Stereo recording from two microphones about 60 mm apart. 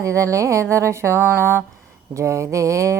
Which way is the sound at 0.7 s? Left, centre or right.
Right.